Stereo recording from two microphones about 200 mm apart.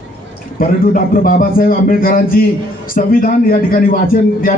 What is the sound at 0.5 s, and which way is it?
A man's voice, 45° left (ahead or behind).